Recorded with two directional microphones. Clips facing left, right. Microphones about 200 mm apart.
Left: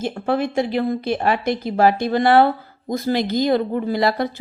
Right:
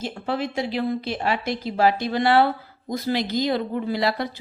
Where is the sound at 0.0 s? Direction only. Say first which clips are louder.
Left 6 dB; 50° left (ahead or behind).